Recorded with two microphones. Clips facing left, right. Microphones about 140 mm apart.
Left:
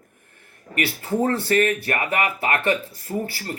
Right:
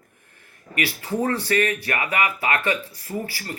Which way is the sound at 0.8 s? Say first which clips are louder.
Left 2 dB; 50° left (ahead or behind).